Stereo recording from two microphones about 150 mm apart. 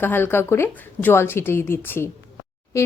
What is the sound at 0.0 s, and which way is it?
A woman's voice, 15° left (ahead or behind).